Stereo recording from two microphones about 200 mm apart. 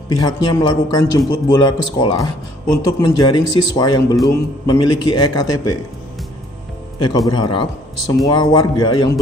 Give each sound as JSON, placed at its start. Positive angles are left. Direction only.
{"t": 0.1, "sound": "a man's voice", "side_deg": 20}
{"t": 7.2, "sound": "a man's voice", "side_deg": 20}